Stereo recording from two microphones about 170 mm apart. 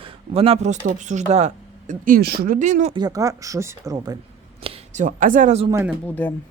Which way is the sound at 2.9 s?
20° right (ahead or behind).